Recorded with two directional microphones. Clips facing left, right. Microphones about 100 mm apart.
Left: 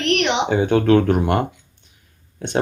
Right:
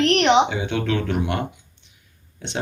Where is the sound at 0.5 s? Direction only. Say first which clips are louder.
Left 9 dB; 45° left (ahead or behind).